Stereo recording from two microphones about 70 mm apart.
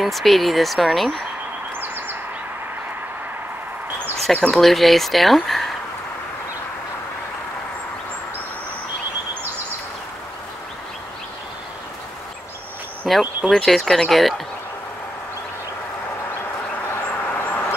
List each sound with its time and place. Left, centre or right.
0.0 s speech: centre
1.8 s bird: right
4.3 s speech: centre
4.6 s speech: centre
13.0 s speech: centre
13.5 s speech: centre
16.3 s a sound: left